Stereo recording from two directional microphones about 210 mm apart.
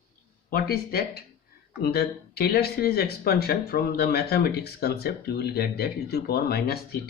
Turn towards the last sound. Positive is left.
turn(degrees=50)  # may be behind; listen again after turning